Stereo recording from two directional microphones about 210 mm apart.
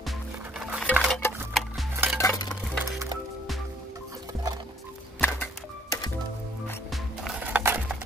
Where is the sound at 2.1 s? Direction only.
15° left (ahead or behind).